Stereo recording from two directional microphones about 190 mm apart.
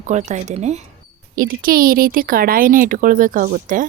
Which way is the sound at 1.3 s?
50° right (ahead or behind).